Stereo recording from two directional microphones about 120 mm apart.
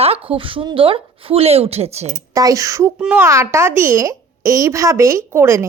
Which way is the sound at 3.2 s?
25° right (ahead or behind).